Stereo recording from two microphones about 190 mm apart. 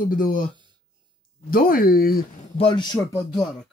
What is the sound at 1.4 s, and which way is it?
Speech, 50° left (ahead or behind).